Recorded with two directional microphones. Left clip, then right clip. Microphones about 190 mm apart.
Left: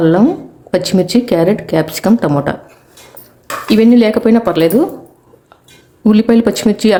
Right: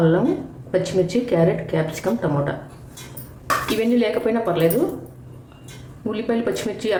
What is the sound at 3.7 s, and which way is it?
Speech, 60° left (ahead or behind).